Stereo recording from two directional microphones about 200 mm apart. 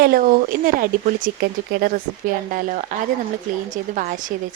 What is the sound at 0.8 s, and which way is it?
Speech, 50° right (ahead or behind).